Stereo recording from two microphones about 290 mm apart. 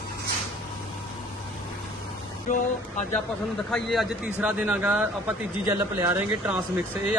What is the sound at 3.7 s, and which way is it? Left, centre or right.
A man's voice, centre.